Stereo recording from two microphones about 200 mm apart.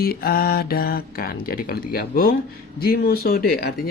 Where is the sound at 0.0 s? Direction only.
50° left (ahead or behind).